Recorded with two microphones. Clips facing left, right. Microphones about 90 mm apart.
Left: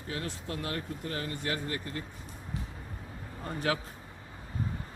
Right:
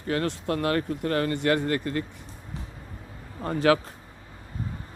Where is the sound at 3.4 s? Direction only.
90° right.